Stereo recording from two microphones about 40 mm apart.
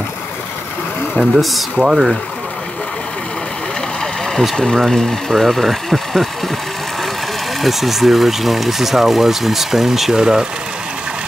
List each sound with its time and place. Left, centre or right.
1.1 s speech: centre
1.8 s speech: centre
4.0 s vehicle: centre
4.7 s speech: centre
7.6 s speech: centre